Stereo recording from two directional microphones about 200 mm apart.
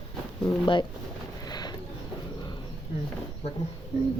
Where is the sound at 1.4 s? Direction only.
20° left (ahead or behind).